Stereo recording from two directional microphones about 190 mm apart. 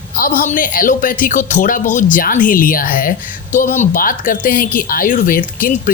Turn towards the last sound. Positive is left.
turn(degrees=45)  # may be behind; listen again after turning